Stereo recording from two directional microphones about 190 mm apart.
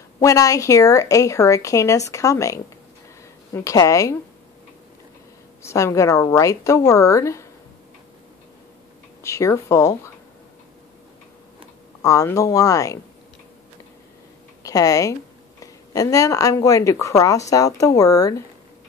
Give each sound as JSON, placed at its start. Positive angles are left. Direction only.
{"t": 0.2, "sound": "speech", "side_deg": 15}
{"t": 5.6, "sound": "speech", "side_deg": 15}
{"t": 9.2, "sound": "speech", "side_deg": 15}
{"t": 12.0, "sound": "speech", "side_deg": 15}
{"t": 14.6, "sound": "speech", "side_deg": 20}